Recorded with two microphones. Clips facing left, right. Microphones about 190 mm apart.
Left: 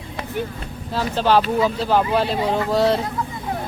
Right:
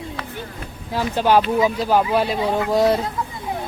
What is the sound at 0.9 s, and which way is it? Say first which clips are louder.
Speech: right 1 dB; 15° right (ahead or behind).